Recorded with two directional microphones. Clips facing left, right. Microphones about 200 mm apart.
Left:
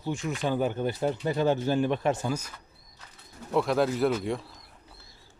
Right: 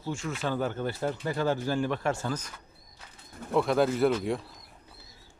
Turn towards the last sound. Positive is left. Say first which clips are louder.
# right 1 dB
turn(degrees=0)  # may be behind; listen again after turning